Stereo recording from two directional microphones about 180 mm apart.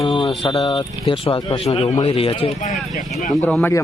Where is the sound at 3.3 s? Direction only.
Centre (ahead or behind).